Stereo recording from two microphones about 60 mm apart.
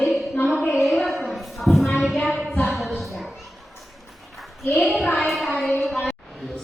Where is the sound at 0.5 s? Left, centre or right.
Left.